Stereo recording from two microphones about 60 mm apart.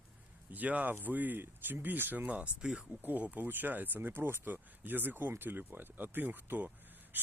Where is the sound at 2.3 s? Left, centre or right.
Right.